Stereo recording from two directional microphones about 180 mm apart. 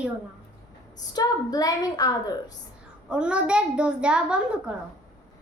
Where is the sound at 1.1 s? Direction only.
20° left (ahead or behind).